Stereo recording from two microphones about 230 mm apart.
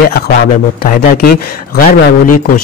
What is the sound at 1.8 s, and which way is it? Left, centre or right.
Speech, left.